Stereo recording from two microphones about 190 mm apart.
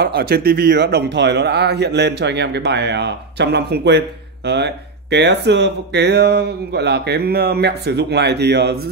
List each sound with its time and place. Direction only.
0.0 s speech: 55° right (ahead or behind)